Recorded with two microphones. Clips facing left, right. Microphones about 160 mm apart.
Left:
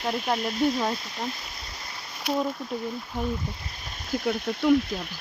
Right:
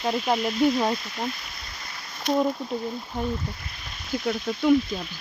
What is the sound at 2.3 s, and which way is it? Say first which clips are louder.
Speech: right 3 dB; 10° left (ahead or behind).